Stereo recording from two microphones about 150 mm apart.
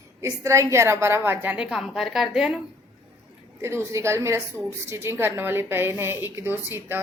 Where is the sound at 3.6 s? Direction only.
15° right (ahead or behind).